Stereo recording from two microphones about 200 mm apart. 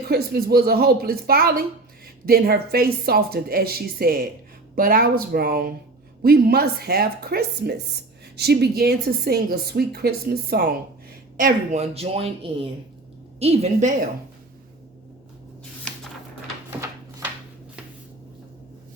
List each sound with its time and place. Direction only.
0.1 s a woman's voice: 50° right (ahead or behind)
11.3 s a woman's voice: 40° right (ahead or behind)